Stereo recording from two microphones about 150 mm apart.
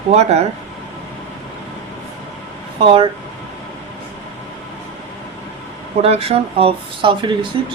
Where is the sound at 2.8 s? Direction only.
35° right (ahead or behind).